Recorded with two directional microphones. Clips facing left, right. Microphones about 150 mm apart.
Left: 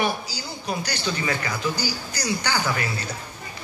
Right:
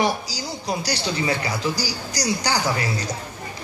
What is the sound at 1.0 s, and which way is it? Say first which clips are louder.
A man's voice: right 3 dB; 30° right (ahead or behind).